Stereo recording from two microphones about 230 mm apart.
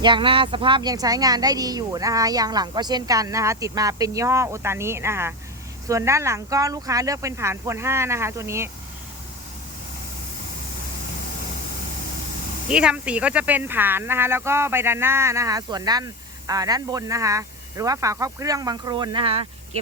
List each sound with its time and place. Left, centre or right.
0.0 s speech: right
12.6 s speech: centre; by 19.8 s right